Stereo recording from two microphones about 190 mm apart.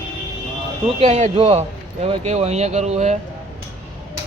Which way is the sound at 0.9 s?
35° right (ahead or behind).